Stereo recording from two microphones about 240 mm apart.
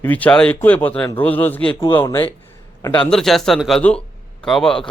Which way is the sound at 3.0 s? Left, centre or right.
Centre.